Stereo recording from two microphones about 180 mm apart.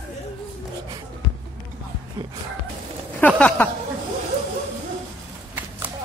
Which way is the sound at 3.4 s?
10° left (ahead or behind).